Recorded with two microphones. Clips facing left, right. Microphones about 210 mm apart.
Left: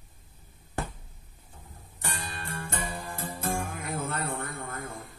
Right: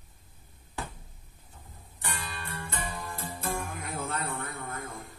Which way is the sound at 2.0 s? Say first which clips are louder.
Left 1 dB; 45° left (ahead or behind).